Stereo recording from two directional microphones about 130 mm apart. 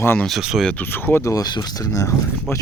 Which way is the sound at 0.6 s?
15° left (ahead or behind).